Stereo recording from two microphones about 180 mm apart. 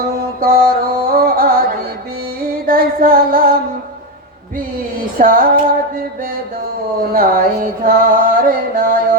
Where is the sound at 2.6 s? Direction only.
55° right (ahead or behind).